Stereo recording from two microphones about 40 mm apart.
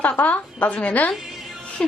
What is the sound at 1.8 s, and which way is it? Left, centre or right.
Speech, centre.